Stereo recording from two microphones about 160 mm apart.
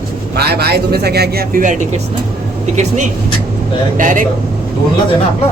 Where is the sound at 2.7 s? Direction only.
50° right (ahead or behind).